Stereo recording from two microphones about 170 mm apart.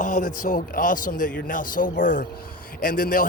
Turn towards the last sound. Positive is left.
turn(degrees=55)  # may be behind; listen again after turning